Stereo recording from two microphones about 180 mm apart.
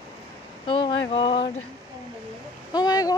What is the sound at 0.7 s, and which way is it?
Speech, 30° left (ahead or behind).